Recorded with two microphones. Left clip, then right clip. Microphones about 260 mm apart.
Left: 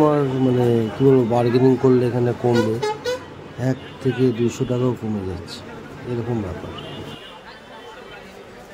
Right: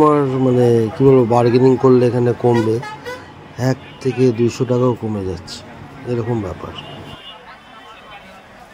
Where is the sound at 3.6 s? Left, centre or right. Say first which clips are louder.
Right 4 dB; centre.